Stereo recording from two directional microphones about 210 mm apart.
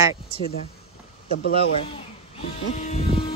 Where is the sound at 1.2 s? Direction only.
55° left (ahead or behind).